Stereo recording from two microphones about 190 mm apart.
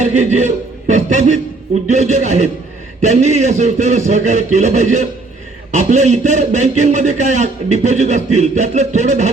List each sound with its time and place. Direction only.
0.0 s a man's voice: 40° right (ahead or behind)